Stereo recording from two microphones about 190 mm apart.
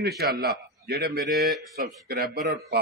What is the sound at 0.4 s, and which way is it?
A man's voice, 55° right (ahead or behind).